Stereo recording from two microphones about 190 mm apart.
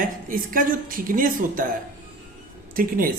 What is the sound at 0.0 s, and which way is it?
Speech, 45° right (ahead or behind).